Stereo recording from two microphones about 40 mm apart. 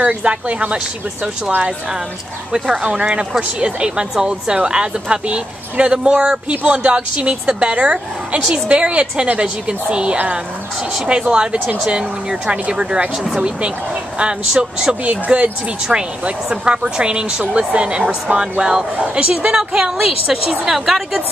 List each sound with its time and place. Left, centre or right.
0.2 s speech: right
2.7 s speech: right
6.1 s a woman's voice: centre
6.5 s speech: right
14.1 s speech: right
15.0 s speech: right
15.9 s a woman's voice: centre
16.6 s speech: right
18.4 s a woman's voice: centre